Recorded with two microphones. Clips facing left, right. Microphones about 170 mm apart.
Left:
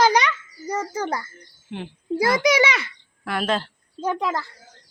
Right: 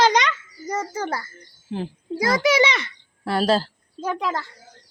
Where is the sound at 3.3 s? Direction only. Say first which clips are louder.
Right 4 dB; 35° right (ahead or behind).